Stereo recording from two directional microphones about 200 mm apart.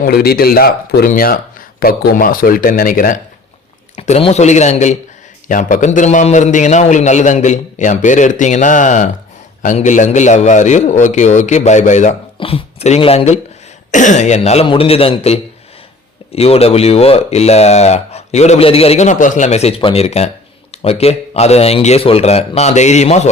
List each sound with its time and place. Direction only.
0.0 s speech: 50° left (ahead or behind); by 23.3 s 35° left (ahead or behind)